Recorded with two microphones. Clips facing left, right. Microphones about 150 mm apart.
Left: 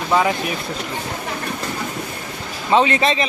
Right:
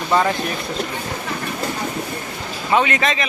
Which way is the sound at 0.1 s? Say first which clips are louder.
Even; 5° left (ahead or behind).